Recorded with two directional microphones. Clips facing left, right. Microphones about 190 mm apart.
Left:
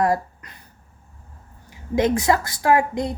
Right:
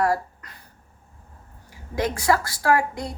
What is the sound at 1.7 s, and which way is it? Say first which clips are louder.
A woman's voice: left 6 dB; 20° left (ahead or behind).